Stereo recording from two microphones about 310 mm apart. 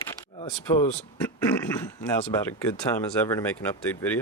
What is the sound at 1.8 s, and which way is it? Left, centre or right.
Speech, centre.